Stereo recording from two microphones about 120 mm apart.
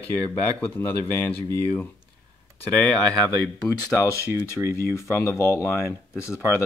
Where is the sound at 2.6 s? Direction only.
10° left (ahead or behind).